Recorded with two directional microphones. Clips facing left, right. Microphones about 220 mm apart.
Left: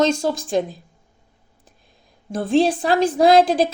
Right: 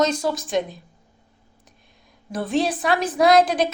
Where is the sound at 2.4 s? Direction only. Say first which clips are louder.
Left 5 dB; 30° left (ahead or behind).